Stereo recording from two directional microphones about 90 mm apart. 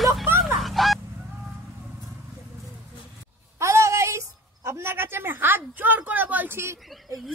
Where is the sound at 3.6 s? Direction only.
35° right (ahead or behind).